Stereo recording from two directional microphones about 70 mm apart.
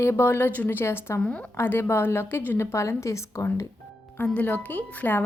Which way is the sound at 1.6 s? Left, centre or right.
Left.